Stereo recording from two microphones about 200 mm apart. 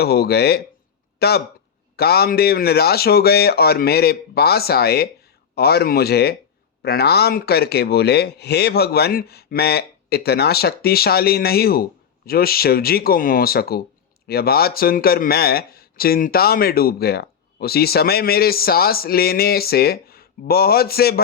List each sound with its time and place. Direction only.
0.0 s speech: 50° left (ahead or behind)